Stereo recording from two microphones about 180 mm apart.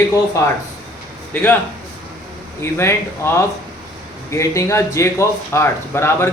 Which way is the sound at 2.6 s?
15° left (ahead or behind).